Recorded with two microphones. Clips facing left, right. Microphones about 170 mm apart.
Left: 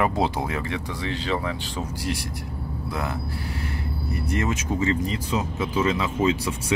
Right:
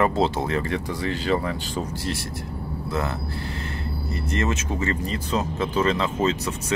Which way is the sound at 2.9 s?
10° left (ahead or behind).